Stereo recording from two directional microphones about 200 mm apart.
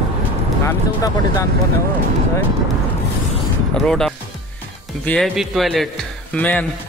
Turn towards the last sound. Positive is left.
turn(degrees=5)  # may be behind; listen again after turning